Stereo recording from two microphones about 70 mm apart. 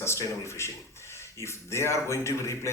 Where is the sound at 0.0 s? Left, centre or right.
Left.